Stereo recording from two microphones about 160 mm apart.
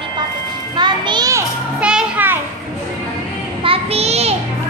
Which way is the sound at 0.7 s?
30° right (ahead or behind).